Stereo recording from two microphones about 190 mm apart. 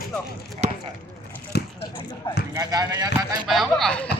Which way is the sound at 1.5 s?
60° left (ahead or behind).